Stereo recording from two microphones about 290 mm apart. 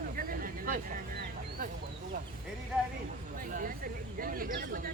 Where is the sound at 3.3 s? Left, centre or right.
Right.